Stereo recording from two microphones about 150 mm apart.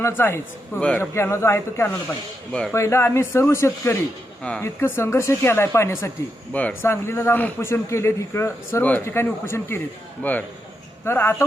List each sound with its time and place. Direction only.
0.0 s a man's voice: 15° left (ahead or behind)